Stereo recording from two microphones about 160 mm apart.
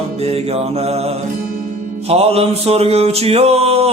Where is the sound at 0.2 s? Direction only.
40° right (ahead or behind).